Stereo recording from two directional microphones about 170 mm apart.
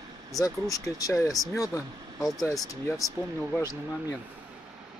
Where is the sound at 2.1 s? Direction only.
Centre (ahead or behind).